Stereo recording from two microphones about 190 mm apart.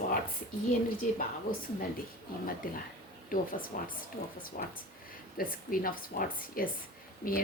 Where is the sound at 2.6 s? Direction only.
50° left (ahead or behind).